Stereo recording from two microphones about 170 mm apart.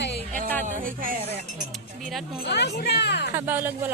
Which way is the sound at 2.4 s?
75° left (ahead or behind).